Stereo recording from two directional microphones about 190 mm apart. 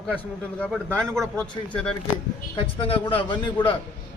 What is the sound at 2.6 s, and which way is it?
A man's voice, 30° left (ahead or behind).